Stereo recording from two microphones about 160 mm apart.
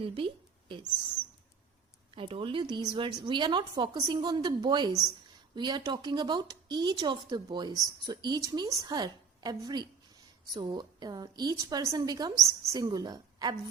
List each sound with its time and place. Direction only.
0.0 s speech: 35° right (ahead or behind)
2.1 s a woman's voice: 35° right (ahead or behind)